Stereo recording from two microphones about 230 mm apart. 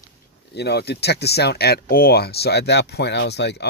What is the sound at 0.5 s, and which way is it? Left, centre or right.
Speech, left.